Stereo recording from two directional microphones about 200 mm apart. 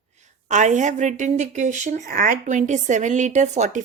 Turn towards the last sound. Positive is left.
turn(degrees=-35)  # may be behind; listen again after turning